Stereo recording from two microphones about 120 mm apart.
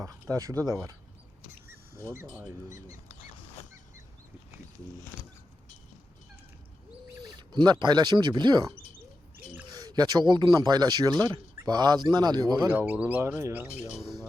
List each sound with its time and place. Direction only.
0.0 s speech: 30° right (ahead or behind)
2.6 s speech: 25° right (ahead or behind)
7.2 s speech: 40° right (ahead or behind)
9.7 s speech: 35° right (ahead or behind)
12.6 s speech: 15° right (ahead or behind)